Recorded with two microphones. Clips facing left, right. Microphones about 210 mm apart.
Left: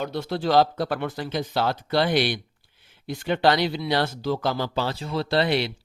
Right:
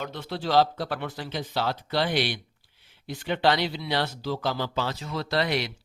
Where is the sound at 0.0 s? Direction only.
40° left (ahead or behind).